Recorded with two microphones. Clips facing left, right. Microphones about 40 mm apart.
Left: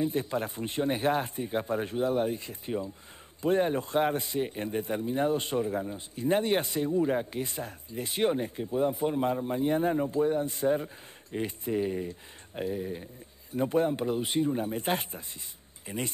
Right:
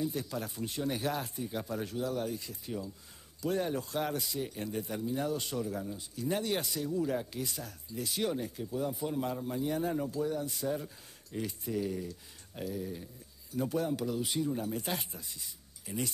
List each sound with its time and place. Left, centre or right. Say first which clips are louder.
0.0 s a man's voice: left 6 dB; left